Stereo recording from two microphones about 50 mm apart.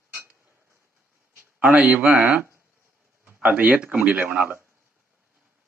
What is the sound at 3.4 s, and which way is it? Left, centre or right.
Speech, right.